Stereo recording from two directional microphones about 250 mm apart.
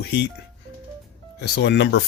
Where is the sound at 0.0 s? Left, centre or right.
Left.